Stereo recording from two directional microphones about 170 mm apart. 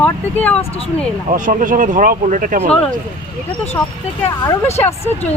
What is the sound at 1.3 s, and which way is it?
Speech, 50° right (ahead or behind).